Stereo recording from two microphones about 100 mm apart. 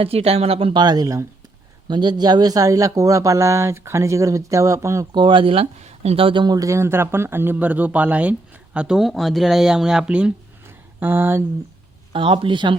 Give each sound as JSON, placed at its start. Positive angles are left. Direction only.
{"t": 0.0, "sound": "speech", "side_deg": -85}
{"t": 0.7, "sound": "speech", "side_deg": -45}
{"t": 1.9, "sound": "speech", "side_deg": -45}
{"t": 5.1, "sound": "speech", "side_deg": -55}
{"t": 11.0, "sound": "speech", "side_deg": -20}
{"t": 12.1, "sound": "speech", "side_deg": -60}